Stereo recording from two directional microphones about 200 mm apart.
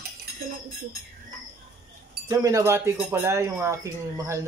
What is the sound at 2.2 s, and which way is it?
Speech, 15° right (ahead or behind).